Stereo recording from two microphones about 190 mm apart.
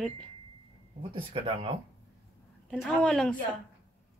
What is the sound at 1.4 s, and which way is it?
Speech, 30° right (ahead or behind).